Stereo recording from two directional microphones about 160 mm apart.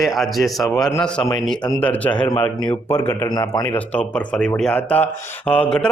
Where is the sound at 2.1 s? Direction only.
30° left (ahead or behind).